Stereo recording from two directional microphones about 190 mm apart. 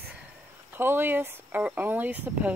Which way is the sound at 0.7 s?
10° right (ahead or behind).